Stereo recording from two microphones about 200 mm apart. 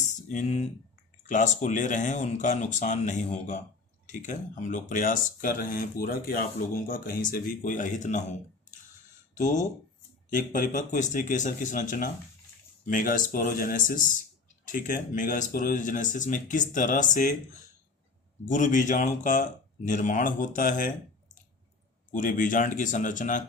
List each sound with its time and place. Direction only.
0.0 s a sound: 35° left (ahead or behind)
1.3 s speech: 40° left (ahead or behind)
9.3 s speech: 35° left (ahead or behind)
18.4 s speech: 40° left (ahead or behind)
22.1 s speech: 45° left (ahead or behind)